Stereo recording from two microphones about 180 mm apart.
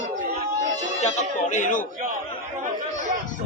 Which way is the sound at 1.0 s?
40° left (ahead or behind).